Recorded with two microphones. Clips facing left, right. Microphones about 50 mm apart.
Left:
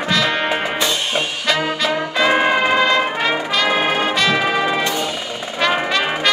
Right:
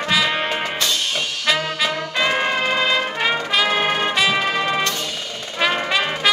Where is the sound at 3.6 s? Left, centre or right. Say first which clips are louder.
Left 4 dB; centre.